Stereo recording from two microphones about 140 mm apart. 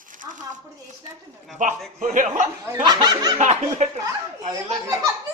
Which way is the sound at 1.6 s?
65° right (ahead or behind).